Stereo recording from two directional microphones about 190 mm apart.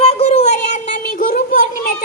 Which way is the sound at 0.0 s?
35° left (ahead or behind).